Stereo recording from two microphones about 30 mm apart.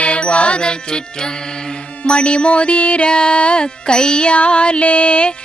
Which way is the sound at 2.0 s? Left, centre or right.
Left.